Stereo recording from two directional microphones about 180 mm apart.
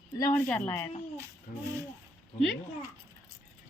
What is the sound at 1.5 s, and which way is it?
Speech, 45° left (ahead or behind).